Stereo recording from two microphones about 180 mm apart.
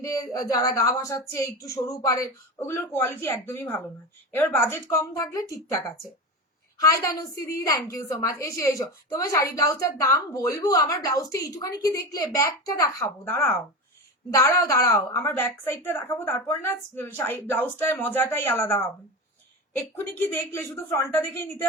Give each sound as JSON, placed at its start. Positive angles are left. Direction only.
{"t": 0.0, "sound": "a woman's voice", "side_deg": 20}